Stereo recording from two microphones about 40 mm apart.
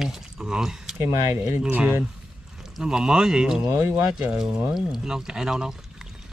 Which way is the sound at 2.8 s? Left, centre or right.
Centre.